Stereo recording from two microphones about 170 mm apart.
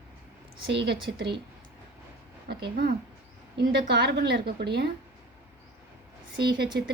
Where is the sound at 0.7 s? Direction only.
80° right.